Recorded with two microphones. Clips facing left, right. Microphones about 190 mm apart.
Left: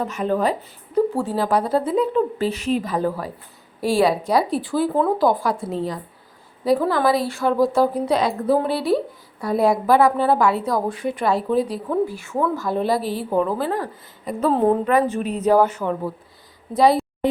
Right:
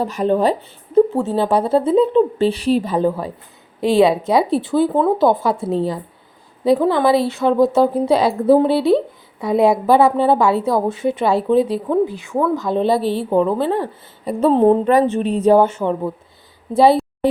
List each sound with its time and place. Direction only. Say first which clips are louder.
0.0 s a woman's voice: right 5 dB; 35° right (ahead or behind)